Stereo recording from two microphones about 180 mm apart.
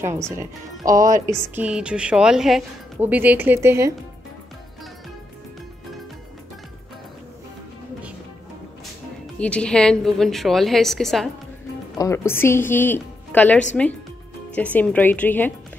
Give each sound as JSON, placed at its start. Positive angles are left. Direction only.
{"t": 0.9, "sound": "a woman's voice", "side_deg": -20}
{"t": 9.4, "sound": "a woman's voice", "side_deg": 5}
{"t": 12.0, "sound": "a woman's voice", "side_deg": 15}